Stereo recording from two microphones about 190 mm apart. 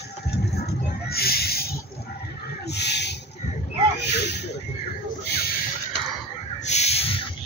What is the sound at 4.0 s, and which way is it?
Snake, 60° left (ahead or behind).